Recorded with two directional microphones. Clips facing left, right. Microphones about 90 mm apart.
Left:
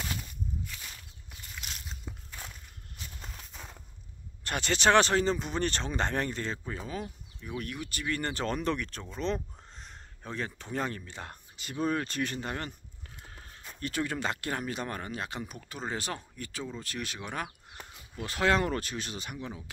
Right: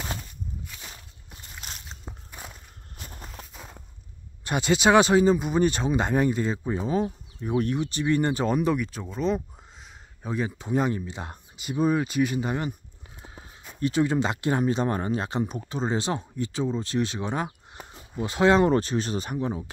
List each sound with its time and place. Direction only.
0.8 s walk: 35° right (ahead or behind)
2.4 s a sound: 15° right (ahead or behind)
3.0 s horse: 45° right (ahead or behind)
4.5 s speech: 15° right (ahead or behind); by 19.6 s 35° right (ahead or behind)